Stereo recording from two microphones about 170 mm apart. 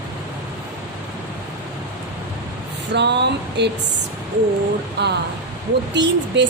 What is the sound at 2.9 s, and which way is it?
Speech, 90° right.